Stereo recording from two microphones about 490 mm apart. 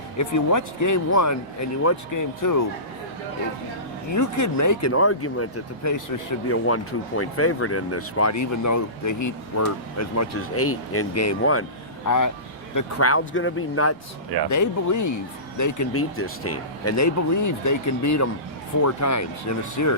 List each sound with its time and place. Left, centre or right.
0.2 s speech: left
4.1 s speech: left
7.2 s speech: left
14.5 s speech: left